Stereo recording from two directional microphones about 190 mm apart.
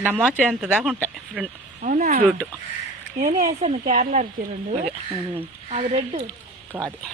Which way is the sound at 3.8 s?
45° right (ahead or behind).